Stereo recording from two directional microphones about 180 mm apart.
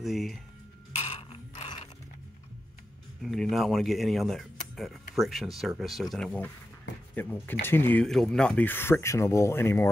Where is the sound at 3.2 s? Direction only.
Centre (ahead or behind).